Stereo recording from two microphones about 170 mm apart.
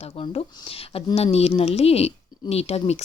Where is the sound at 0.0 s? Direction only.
35° left (ahead or behind).